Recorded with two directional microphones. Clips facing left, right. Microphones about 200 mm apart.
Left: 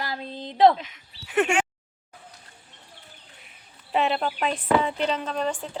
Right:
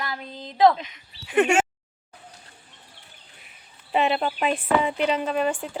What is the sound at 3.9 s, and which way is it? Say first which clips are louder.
Speech: right 2 dB; centre (ahead or behind).